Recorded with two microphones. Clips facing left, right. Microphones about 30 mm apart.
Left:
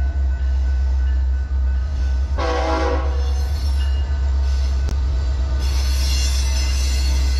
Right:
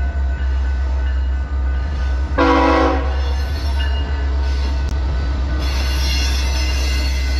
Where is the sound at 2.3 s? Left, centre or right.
Right.